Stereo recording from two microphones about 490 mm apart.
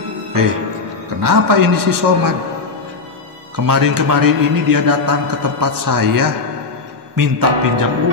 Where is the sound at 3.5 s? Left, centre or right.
Right.